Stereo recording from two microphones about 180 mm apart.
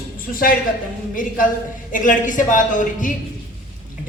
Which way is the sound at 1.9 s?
45° left (ahead or behind).